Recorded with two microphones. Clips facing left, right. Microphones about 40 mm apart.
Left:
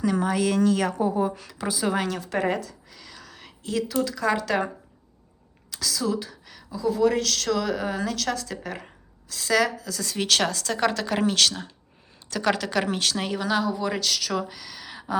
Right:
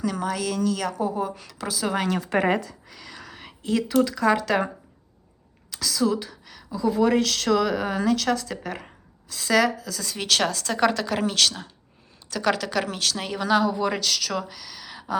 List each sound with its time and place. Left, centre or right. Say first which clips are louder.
0.0 s a woman's voice: left 3 dB; centre
0.4 s a woman's voice: left 4 dB; left
1.1 s a woman's voice: left 3 dB; centre
2.4 s speech: right 1 dB; right
2.9 s whispering: right 4 dB; centre
4.0 s speech: right 3 dB; centre
5.7 s a woman's voice: right 3 dB; centre
6.9 s speech: right 1 dB; centre